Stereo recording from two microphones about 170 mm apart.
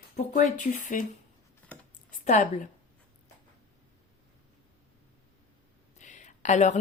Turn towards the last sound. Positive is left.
turn(degrees=45)  # may be behind; listen again after turning